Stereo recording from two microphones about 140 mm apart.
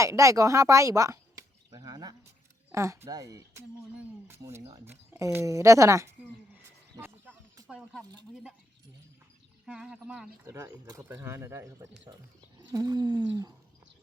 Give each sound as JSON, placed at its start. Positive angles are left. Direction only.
{"t": 0.0, "sound": "speech", "side_deg": -20}
{"t": 6.9, "sound": "a sound", "side_deg": -20}
{"t": 7.8, "sound": "speech", "side_deg": -5}
{"t": 9.6, "sound": "speech", "side_deg": -5}
{"t": 10.4, "sound": "speech", "side_deg": -20}